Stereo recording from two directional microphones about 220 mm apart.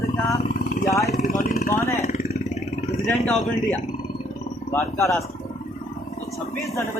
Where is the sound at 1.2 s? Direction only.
40° left (ahead or behind).